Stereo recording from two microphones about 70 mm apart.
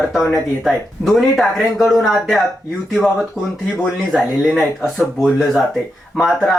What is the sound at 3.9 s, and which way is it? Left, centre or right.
Speech, centre.